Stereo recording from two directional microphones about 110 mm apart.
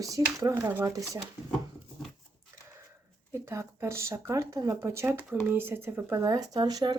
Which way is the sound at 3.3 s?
25° right (ahead or behind).